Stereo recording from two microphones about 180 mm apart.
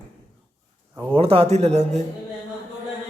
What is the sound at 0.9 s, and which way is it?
Speech, 30° right (ahead or behind).